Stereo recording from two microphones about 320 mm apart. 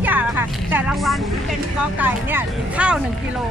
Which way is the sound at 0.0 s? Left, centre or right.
Centre.